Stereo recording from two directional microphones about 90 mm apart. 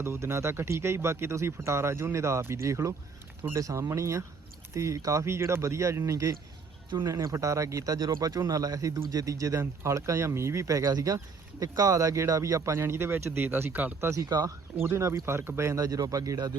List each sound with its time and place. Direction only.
0.0 s speech: 30° right (ahead or behind)
14.1 s speech: 45° right (ahead or behind)
14.8 s speech: 30° right (ahead or behind)
15.8 s speech: 45° right (ahead or behind)